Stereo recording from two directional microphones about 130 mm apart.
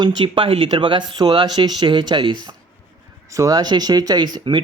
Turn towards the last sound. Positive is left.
turn(degrees=-35)  # may be behind; listen again after turning